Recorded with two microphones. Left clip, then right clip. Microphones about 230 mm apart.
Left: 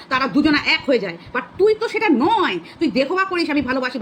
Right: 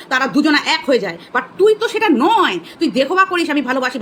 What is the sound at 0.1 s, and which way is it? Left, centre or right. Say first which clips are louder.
A woman's voice: right 3 dB; centre.